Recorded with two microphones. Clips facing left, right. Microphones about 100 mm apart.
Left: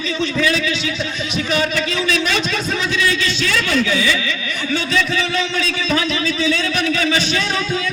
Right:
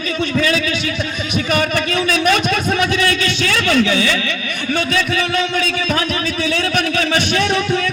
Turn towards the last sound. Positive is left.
turn(degrees=-55)  # may be behind; listen again after turning